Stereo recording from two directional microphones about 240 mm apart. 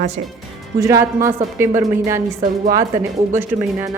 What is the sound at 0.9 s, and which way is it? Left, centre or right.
Speech, centre.